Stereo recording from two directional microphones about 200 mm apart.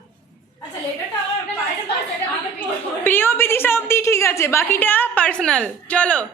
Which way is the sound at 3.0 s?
10° left (ahead or behind).